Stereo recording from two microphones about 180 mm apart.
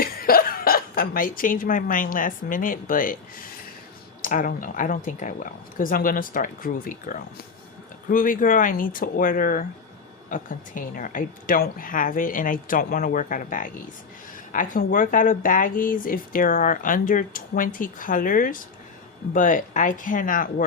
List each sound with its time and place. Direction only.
0.0 s speech: 55° left (ahead or behind)